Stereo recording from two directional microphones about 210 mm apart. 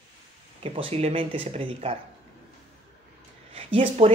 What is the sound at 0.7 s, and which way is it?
Speech, 25° right (ahead or behind).